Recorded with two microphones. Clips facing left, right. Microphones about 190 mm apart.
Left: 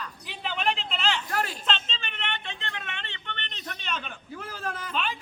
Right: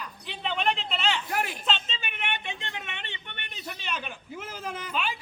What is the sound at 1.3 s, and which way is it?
Speech, 15° right (ahead or behind).